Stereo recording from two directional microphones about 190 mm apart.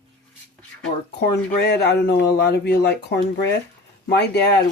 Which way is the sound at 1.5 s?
60° left (ahead or behind).